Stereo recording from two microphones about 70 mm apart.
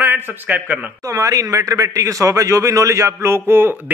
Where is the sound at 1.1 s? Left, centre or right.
Right.